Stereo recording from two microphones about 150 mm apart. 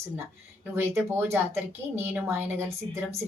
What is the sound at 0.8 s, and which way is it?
A woman's voice, 15° right (ahead or behind).